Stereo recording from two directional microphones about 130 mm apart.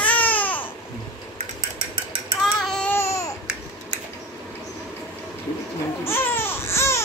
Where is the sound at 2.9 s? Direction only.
20° left (ahead or behind).